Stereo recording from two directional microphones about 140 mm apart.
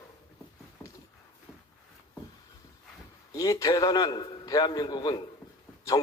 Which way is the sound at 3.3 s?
25° left (ahead or behind).